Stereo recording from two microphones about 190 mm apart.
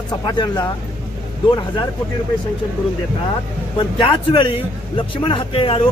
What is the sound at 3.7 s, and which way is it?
A man's voice, 25° left (ahead or behind).